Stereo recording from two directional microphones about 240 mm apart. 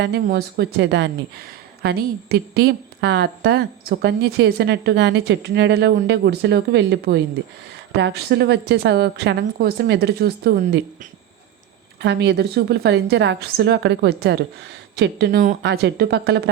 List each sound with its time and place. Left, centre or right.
0.3 s a woman's voice: right
11.9 s a woman's voice: right